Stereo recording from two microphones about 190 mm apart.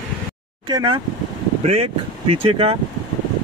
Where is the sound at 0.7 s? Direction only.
20° right (ahead or behind).